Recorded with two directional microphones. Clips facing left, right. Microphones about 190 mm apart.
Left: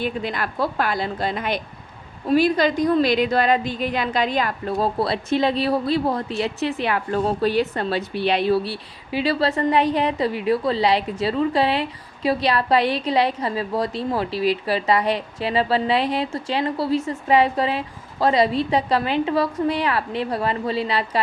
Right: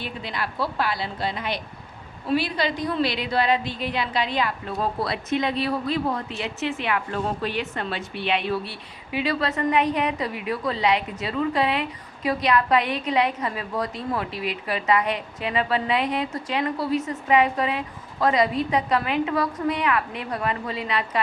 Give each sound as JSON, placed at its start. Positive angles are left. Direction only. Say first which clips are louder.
{"t": 0.0, "sound": "a woman's voice", "louder": "left 6 dB", "side_deg": 50}